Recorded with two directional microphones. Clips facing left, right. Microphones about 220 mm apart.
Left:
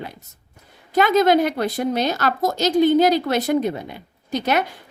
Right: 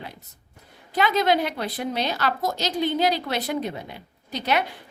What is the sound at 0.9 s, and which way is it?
A woman's voice, 45° left (ahead or behind).